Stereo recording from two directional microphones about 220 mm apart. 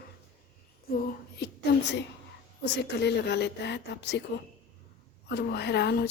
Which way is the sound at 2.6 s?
50° left (ahead or behind).